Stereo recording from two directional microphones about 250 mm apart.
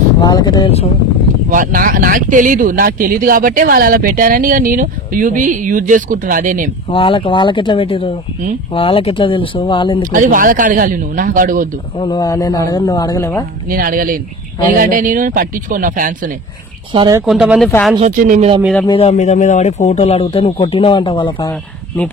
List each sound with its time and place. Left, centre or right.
0.2 s a man's voice: centre
1.5 s speech: right
6.9 s speech: left
10.1 s speech: right
12.0 s a man's voice: centre
13.7 s speech: right
16.9 s speech: centre
17.3 s speech: centre
17.9 s speech: right
18.6 s speech: centre
18.9 s speech: left